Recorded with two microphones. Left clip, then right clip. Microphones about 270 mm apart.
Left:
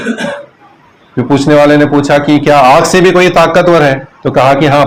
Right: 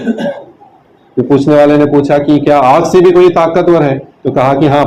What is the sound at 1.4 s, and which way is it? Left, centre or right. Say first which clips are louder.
A man's voice: left 1 dB; left.